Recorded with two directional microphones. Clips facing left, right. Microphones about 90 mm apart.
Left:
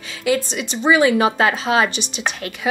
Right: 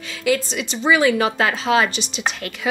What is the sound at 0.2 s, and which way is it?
A woman's voice, 25° left (ahead or behind).